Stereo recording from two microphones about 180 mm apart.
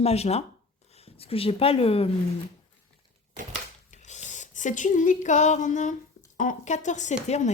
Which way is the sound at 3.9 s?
40° left (ahead or behind).